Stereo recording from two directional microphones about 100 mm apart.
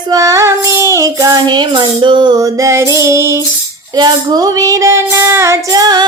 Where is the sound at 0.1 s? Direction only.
35° right (ahead or behind).